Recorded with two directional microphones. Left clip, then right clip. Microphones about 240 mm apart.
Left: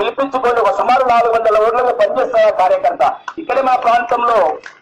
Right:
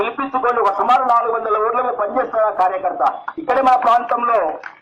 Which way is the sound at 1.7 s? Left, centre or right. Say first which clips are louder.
Left 5 dB; right.